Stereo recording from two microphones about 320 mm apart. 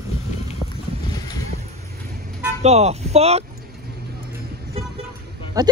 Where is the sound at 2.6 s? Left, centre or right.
Centre.